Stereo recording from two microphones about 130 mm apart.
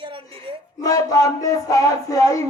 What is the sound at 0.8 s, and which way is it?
Music, 25° left (ahead or behind).